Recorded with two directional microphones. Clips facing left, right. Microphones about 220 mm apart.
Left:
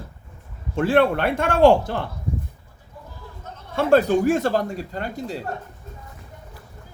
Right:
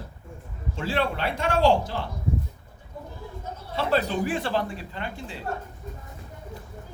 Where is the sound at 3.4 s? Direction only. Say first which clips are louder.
Right 3 dB; 10° right (ahead or behind).